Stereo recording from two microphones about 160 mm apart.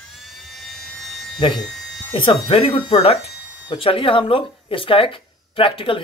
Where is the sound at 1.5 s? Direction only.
Centre (ahead or behind).